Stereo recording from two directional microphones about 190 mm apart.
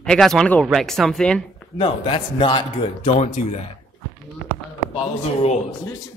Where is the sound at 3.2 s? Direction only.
35° left (ahead or behind).